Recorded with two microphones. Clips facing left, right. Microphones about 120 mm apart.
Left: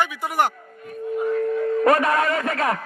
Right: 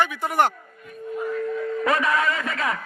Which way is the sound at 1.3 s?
40° left (ahead or behind).